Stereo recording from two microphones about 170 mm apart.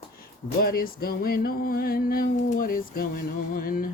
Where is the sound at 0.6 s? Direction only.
60° left (ahead or behind).